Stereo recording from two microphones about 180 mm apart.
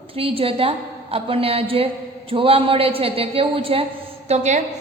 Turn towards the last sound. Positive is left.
turn(degrees=-40)  # may be behind; listen again after turning